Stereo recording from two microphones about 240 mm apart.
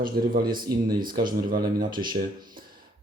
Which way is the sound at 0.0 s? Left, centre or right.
Right.